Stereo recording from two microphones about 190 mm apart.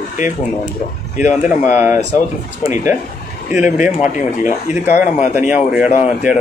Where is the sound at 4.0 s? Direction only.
40° left (ahead or behind).